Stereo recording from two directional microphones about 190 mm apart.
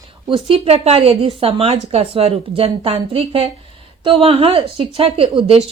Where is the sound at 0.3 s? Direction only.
25° right (ahead or behind).